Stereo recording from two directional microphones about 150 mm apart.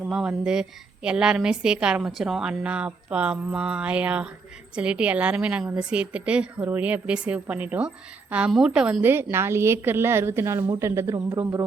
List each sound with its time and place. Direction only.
0.1 s a woman's voice: 5° right (ahead or behind); by 11.3 s 20° right (ahead or behind)